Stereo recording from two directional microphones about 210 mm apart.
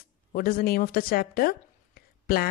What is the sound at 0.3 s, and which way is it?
Speech, 45° left (ahead or behind).